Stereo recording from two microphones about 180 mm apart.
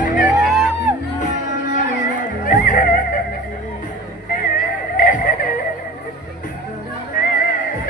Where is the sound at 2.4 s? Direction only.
50° left (ahead or behind).